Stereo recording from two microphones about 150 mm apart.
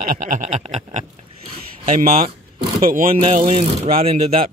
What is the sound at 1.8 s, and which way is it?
Speech, 70° right (ahead or behind).